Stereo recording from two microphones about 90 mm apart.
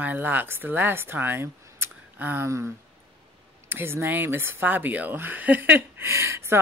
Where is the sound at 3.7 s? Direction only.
25° right (ahead or behind).